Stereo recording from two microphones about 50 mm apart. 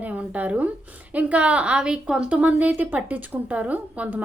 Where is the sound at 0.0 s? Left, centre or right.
Right; by 2.2 s centre.